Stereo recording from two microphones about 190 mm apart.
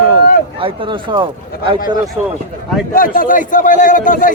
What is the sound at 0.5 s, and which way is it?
Speech, 30° right (ahead or behind).